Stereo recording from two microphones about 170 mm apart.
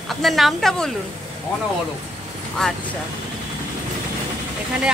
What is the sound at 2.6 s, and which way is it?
Speech, 5° left (ahead or behind).